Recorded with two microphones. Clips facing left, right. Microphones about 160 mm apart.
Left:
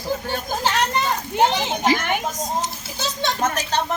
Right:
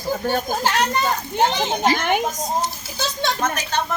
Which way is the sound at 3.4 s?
35° left (ahead or behind).